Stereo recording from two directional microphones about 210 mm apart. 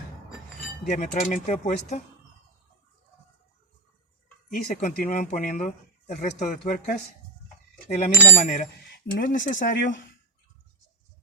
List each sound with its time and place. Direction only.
0.9 s speech: 35° left (ahead or behind)
4.4 s speech: 35° left (ahead or behind)
7.9 s speech: 35° left (ahead or behind)